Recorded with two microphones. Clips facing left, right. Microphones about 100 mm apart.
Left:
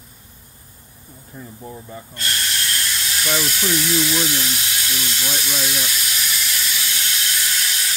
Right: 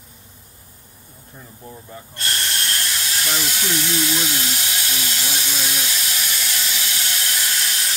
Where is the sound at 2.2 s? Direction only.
30° right (ahead or behind).